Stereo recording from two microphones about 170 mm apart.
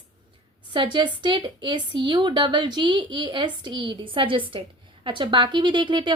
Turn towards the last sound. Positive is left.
turn(degrees=-25)  # may be behind; listen again after turning